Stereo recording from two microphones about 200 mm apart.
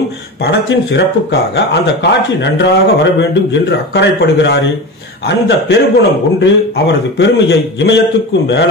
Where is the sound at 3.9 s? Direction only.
60° left (ahead or behind).